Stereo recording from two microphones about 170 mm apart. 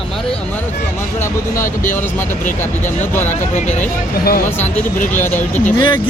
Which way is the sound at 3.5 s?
45° left (ahead or behind).